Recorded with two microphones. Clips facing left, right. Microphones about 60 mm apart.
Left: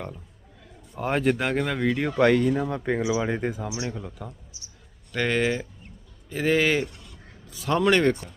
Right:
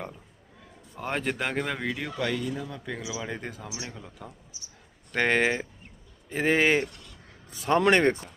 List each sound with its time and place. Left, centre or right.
0.9 s speech: centre
2.1 s speech: left
3.1 s speech: left
3.8 s speech: centre
5.1 s speech: right